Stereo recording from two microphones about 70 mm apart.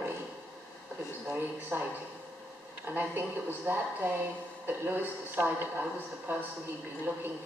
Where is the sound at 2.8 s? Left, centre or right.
Right.